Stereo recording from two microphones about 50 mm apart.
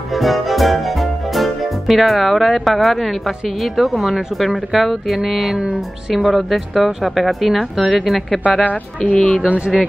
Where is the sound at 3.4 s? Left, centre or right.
Centre.